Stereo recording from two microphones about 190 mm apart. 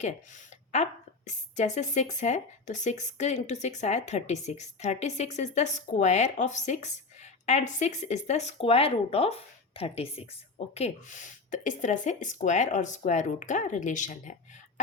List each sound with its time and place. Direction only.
0.0 s a woman's voice: 40° left (ahead or behind)